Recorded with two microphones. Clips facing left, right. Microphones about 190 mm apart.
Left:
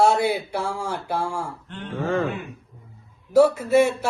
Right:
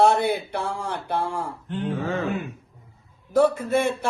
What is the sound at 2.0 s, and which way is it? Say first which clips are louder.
Speech: left 8 dB; 50° left (ahead or behind).